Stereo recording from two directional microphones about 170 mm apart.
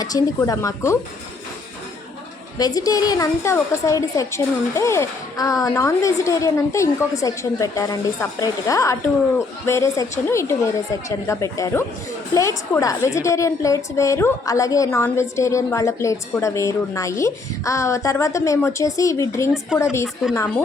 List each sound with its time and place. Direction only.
0.0 s a woman's voice: 20° left (ahead or behind)
2.6 s a woman's voice: 20° left (ahead or behind)